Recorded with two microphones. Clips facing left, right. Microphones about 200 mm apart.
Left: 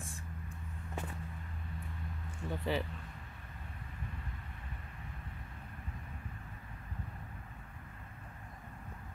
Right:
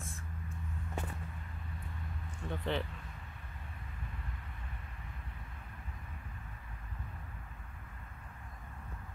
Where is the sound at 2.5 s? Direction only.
5° left (ahead or behind).